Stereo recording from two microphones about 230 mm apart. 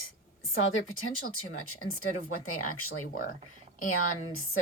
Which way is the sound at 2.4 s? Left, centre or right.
Left.